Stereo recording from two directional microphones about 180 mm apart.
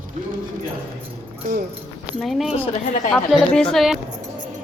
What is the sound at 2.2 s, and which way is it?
Speech, centre (ahead or behind).